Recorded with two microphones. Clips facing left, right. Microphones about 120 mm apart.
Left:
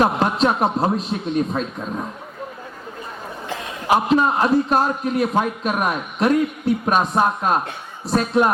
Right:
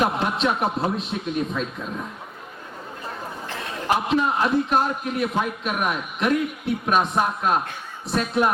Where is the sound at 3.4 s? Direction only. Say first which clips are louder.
Left 1 dB; 15° left (ahead or behind).